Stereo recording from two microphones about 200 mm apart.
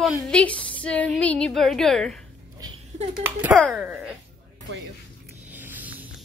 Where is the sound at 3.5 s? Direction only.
5° left (ahead or behind).